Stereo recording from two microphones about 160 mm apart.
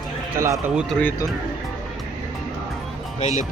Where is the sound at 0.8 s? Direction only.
Centre (ahead or behind).